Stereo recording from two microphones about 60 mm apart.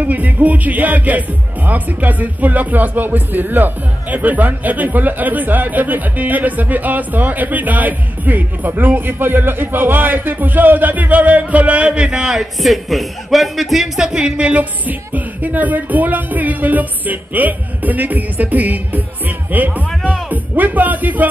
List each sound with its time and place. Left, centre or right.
0.0 s speech: right